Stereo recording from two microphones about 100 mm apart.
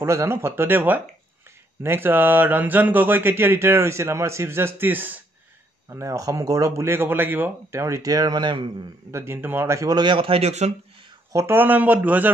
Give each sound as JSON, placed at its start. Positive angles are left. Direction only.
{"t": 0.0, "sound": "speech", "side_deg": -30}
{"t": 5.9, "sound": "speech", "side_deg": -30}
{"t": 9.1, "sound": "speech", "side_deg": -25}
{"t": 9.9, "sound": "speech", "side_deg": -55}
{"t": 11.3, "sound": "speech", "side_deg": -25}